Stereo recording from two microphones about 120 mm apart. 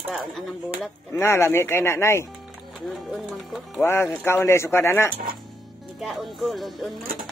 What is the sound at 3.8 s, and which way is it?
Speech, 20° left (ahead or behind).